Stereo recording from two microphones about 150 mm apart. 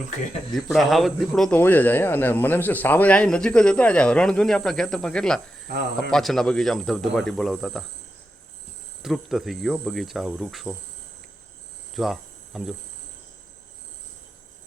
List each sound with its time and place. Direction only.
0.5 s a man's voice: centre (ahead or behind)
1.5 s speech: 10° left (ahead or behind)
5.6 s speech: 90° right
6.1 s a man's voice: 5° left (ahead or behind)
9.0 s a man's voice: centre (ahead or behind)
11.9 s cricket: centre (ahead or behind)